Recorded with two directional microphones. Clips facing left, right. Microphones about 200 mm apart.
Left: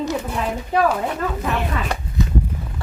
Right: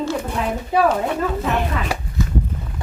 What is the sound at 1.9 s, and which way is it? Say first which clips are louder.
Chopping: right 1 dB; 5° right (ahead or behind).